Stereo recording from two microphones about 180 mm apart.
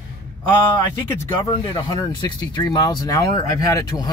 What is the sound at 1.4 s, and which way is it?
Speech, 25° left (ahead or behind).